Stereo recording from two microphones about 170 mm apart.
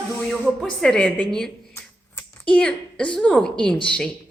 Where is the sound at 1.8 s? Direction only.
10° left (ahead or behind).